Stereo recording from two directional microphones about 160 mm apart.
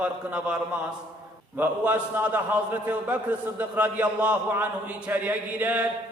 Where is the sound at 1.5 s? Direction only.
10° right (ahead or behind).